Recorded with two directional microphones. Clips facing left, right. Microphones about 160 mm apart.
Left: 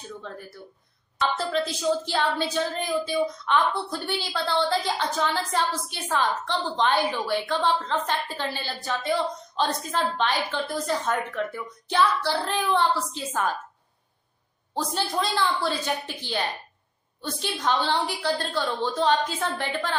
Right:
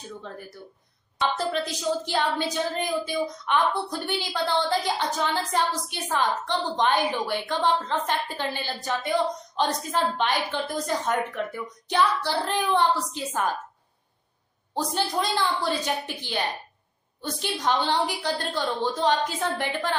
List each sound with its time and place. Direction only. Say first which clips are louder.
1.2 s speech: even; 15° right (ahead or behind)
14.9 s speech: even; 15° right (ahead or behind)
17.4 s speech: even; 15° right (ahead or behind)